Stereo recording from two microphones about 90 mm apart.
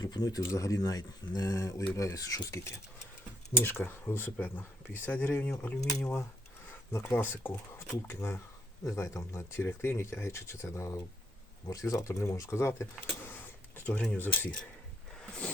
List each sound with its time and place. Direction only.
0.0 s speech: 45° left (ahead or behind)
3.6 s speech: 25° left (ahead or behind)